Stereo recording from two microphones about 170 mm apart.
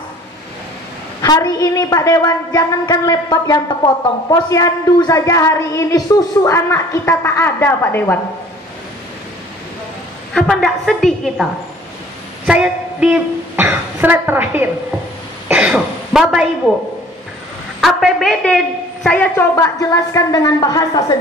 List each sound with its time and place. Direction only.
1.2 s a woman's voice: 20° left (ahead or behind)
10.3 s a woman's voice: 5° left (ahead or behind)
12.4 s a woman's voice: 5° right (ahead or behind)
15.4 s throat clearing: 5° right (ahead or behind)
17.7 s a woman's voice: centre (ahead or behind); by 21.0 s 20° left (ahead or behind)